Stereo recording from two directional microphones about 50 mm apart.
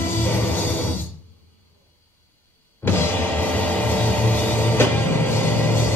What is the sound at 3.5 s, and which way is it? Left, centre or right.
Music, left.